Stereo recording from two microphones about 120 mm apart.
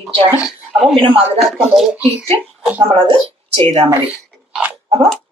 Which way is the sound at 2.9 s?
45° right (ahead or behind).